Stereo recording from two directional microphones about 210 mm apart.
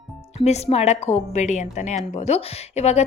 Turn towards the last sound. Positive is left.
turn(degrees=30)  # may be behind; listen again after turning